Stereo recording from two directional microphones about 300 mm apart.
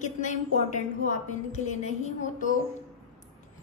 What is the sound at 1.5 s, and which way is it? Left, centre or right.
A woman's voice, left.